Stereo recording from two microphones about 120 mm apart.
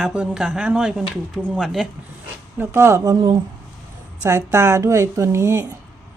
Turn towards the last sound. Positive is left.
turn(degrees=-25)  # may be behind; listen again after turning